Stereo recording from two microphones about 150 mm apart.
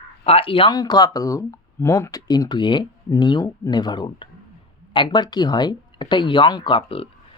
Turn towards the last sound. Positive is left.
turn(degrees=40)  # may be behind; listen again after turning